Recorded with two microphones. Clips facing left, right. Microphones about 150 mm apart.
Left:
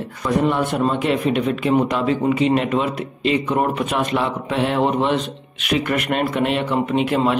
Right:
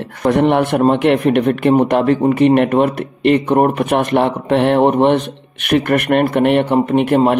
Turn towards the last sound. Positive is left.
turn(degrees=-55)  # may be behind; listen again after turning